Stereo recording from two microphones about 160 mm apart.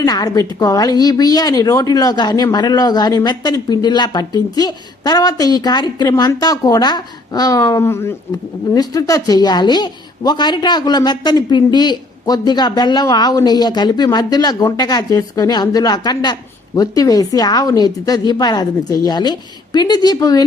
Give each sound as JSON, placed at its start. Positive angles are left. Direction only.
{"t": 0.0, "sound": "a woman's voice", "side_deg": 25}